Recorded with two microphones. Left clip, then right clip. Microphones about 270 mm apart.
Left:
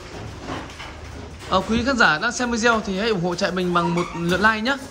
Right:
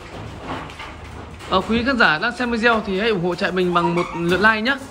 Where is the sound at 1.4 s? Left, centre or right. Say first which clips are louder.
Right 1 dB; centre.